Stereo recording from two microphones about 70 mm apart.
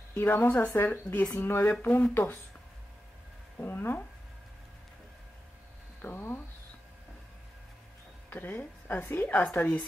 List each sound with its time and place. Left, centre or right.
0.1 s a woman's voice: left
3.5 s a woman's voice: left
6.0 s speech: left
8.3 s a woman's voice: left